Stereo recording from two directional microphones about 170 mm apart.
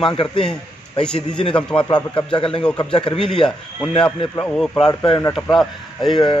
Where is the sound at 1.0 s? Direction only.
5° left (ahead or behind).